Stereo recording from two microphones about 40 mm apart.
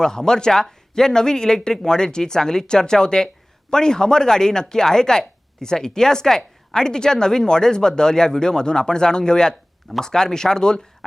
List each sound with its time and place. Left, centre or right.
0.0 s speech: centre